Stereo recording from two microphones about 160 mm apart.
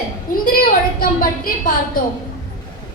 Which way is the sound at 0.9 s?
65° left (ahead or behind).